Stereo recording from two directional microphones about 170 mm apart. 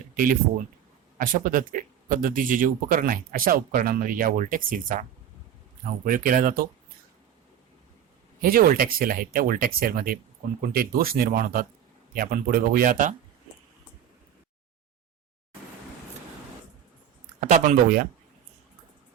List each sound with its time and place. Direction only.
0.1 s a sound: 55° right (ahead or behind)
1.2 s speech: 50° right (ahead or behind)
8.4 s speech: 55° right (ahead or behind)
17.4 s speech: 50° right (ahead or behind)